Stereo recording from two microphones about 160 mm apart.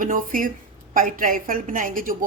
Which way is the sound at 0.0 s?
55° right (ahead or behind).